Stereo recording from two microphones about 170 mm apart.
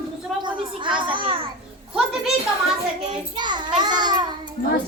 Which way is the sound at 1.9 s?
5° right (ahead or behind).